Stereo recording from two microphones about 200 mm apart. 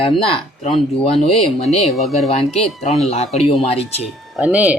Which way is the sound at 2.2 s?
30° left (ahead or behind).